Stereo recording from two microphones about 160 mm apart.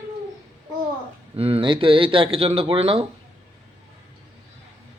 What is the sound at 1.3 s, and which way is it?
Speech, 40° right (ahead or behind).